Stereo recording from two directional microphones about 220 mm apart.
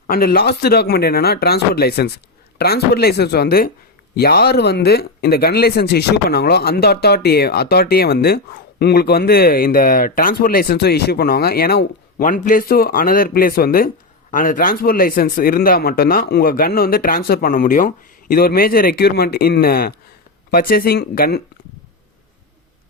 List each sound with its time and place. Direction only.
0.1 s speech: 45° left (ahead or behind)